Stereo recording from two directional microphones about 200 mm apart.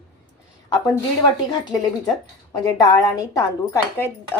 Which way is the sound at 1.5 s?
20° left (ahead or behind).